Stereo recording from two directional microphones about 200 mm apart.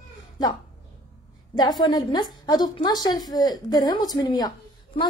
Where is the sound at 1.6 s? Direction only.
20° left (ahead or behind).